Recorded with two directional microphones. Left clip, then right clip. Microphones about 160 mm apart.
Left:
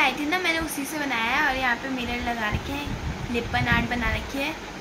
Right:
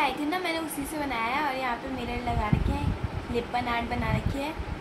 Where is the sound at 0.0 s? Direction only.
5° right (ahead or behind).